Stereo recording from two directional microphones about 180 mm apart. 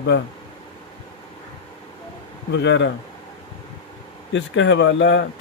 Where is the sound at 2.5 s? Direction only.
85° left.